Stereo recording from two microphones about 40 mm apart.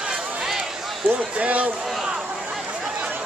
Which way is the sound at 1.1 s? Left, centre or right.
Right.